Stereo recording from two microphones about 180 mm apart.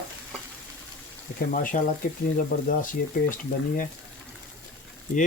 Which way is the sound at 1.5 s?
50° left (ahead or behind).